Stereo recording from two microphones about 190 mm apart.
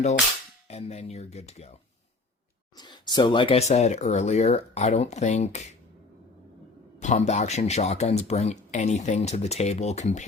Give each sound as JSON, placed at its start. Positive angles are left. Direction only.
{"t": 0.7, "sound": "speech", "side_deg": 35}
{"t": 2.7, "sound": "speech", "side_deg": 25}
{"t": 7.0, "sound": "speech", "side_deg": 35}